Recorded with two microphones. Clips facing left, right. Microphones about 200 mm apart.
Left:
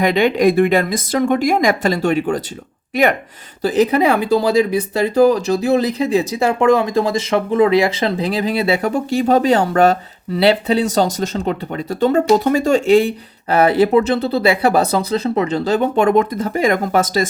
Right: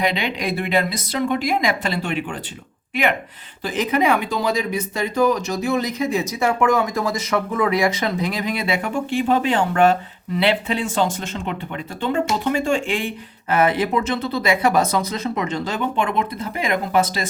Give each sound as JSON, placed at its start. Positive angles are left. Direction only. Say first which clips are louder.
{"t": 0.0, "sound": "speech", "louder": "left 9 dB", "side_deg": 45}